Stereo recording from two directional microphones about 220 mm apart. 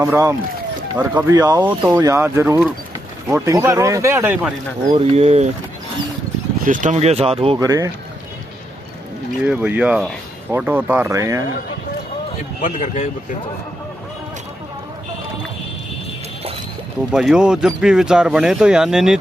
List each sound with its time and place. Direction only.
0.0 s speech: 15° right (ahead or behind)
4.9 s speech: 25° right (ahead or behind)
6.6 s speech: 35° right (ahead or behind)
7.5 s speech: 15° right (ahead or behind)
9.4 s speech: 5° right (ahead or behind)
12.6 s speech: 35° left (ahead or behind)
17.1 s speech: 5° right (ahead or behind)